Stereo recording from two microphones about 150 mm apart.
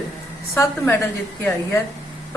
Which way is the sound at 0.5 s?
20° left (ahead or behind).